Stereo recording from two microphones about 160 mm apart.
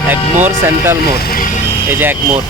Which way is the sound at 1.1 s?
70° left (ahead or behind).